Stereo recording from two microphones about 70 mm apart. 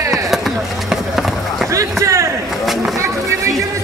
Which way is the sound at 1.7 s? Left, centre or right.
Right.